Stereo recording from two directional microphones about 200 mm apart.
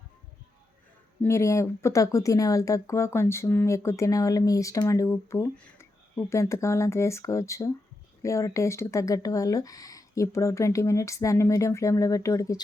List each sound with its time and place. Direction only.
1.2 s speech: 15° left (ahead or behind)